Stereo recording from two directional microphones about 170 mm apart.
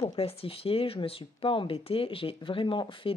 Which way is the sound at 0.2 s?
35° left (ahead or behind).